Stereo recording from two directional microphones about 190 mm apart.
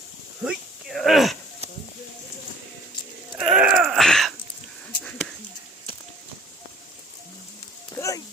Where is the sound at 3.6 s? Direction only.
5° right (ahead or behind).